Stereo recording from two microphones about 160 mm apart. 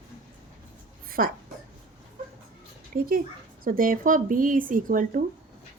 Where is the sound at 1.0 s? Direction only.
65° right (ahead or behind).